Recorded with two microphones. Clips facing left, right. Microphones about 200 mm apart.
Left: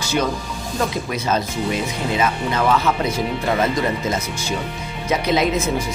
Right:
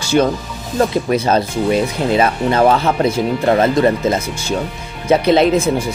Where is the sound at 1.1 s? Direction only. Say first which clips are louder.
Right 7 dB; 35° right (ahead or behind).